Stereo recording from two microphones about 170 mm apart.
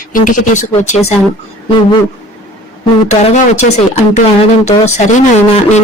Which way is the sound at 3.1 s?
40° left (ahead or behind).